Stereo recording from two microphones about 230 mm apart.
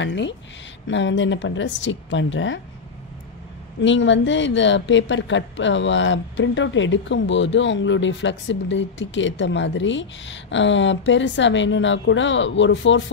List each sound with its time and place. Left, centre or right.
0.0 s speech: left
3.8 s speech: left